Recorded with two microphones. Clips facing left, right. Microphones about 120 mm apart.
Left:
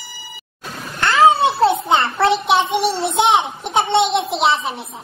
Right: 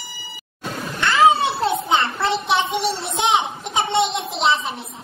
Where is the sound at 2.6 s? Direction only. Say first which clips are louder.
Left 4 dB; centre (ahead or behind).